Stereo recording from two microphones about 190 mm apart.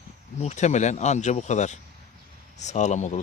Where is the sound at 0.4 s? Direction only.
40° left (ahead or behind).